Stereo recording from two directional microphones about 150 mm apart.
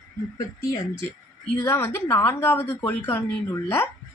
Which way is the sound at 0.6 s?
20° left (ahead or behind).